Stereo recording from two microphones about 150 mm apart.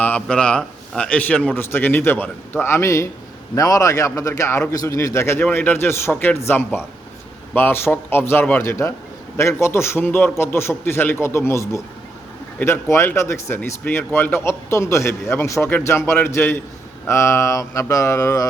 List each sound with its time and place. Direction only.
0.0 s a man's voice: 10° left (ahead or behind)